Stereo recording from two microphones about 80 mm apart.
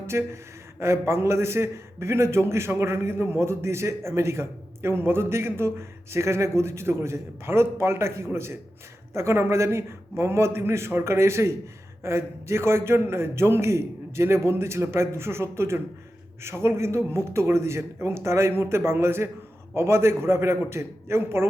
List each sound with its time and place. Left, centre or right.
0.1 s a man's voice: right